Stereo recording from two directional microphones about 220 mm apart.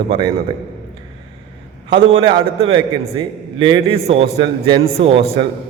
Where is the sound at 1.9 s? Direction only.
20° right (ahead or behind).